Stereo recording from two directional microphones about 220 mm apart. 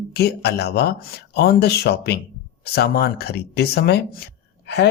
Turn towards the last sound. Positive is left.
turn(degrees=50)  # may be behind; listen again after turning